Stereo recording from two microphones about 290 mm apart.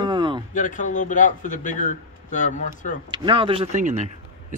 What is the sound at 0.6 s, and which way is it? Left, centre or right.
A man's voice, left.